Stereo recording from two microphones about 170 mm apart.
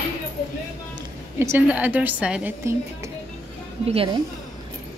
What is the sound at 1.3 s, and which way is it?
A woman's voice, 15° right (ahead or behind).